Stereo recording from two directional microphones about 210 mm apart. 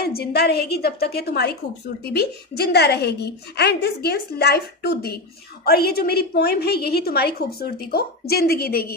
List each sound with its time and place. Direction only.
0.0 s a woman's voice: 50° left (ahead or behind)